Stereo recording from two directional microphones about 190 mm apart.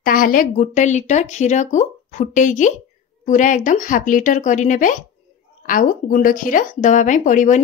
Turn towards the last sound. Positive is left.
turn(degrees=40)  # may be behind; listen again after turning